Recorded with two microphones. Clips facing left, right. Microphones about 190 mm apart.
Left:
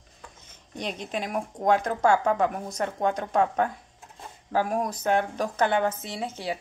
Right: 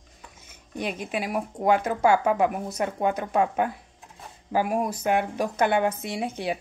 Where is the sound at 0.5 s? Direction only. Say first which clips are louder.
Right 3 dB; 10° right (ahead or behind).